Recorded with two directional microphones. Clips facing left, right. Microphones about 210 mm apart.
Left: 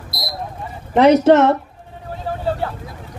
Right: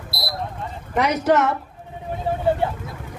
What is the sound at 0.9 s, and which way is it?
Speech, 30° left (ahead or behind).